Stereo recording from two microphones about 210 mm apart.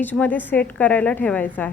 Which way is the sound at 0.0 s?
10° left (ahead or behind).